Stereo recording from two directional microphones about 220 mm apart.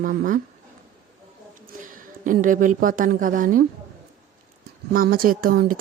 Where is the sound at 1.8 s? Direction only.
35° right (ahead or behind).